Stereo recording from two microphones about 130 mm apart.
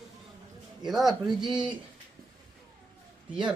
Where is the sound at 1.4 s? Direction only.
35° right (ahead or behind).